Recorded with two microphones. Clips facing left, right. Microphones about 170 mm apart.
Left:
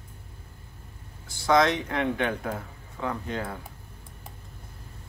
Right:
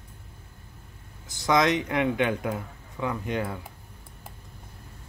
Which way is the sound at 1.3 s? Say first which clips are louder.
Left 1 dB; 20° right (ahead or behind).